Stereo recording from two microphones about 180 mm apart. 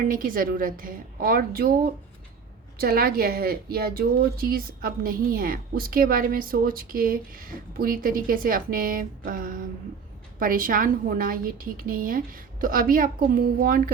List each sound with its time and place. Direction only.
0.1 s speech: 50° right (ahead or behind)
2.7 s speech: 55° right (ahead or behind)